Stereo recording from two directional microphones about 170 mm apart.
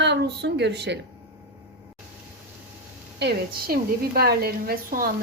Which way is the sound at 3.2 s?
70° right (ahead or behind).